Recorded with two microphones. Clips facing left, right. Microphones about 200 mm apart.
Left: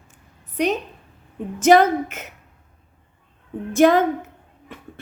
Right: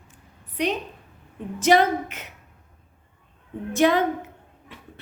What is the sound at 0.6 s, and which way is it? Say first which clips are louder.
A woman's voice: left 4 dB; 45° left (ahead or behind).